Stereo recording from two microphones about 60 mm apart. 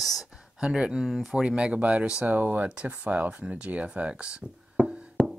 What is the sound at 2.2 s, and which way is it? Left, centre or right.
Speech, right.